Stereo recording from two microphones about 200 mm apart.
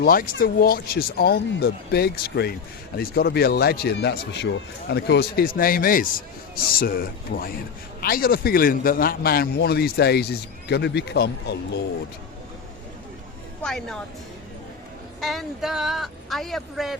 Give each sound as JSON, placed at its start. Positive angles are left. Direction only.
{"t": 0.0, "sound": "a man's voice", "side_deg": 45}
{"t": 13.6, "sound": "a woman's voice", "side_deg": 5}
{"t": 15.2, "sound": "speech", "side_deg": 0}